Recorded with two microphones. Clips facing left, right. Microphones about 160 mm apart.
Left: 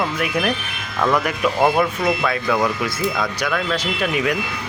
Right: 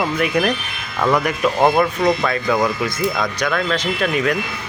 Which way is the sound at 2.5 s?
15° right (ahead or behind).